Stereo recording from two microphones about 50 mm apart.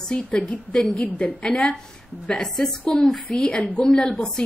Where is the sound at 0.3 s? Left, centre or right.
Left.